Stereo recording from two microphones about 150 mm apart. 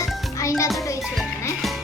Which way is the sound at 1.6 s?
Centre (ahead or behind).